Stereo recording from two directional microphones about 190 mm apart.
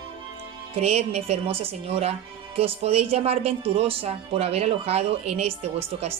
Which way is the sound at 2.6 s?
30° right (ahead or behind).